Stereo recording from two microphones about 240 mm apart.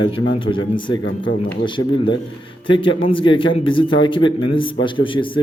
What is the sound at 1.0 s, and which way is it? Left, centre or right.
Speech, left.